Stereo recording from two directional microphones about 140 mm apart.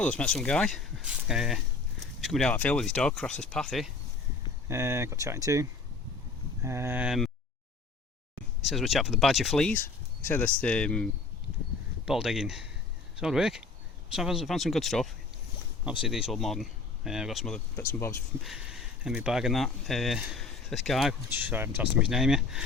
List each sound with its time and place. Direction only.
0.0 s speech: 10° left (ahead or behind)
4.7 s speech: 20° right (ahead or behind)
8.7 s speech: centre (ahead or behind)
12.0 s speech: 5° right (ahead or behind)
17.7 s speech: 15° left (ahead or behind)
18.4 s speech: 5° right (ahead or behind)
21.3 s speech: 15° right (ahead or behind)